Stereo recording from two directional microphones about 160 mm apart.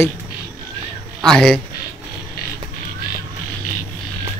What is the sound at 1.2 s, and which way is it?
Speech, 5° left (ahead or behind).